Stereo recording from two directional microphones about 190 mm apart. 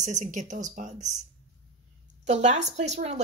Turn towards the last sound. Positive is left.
turn(degrees=-35)  # may be behind; listen again after turning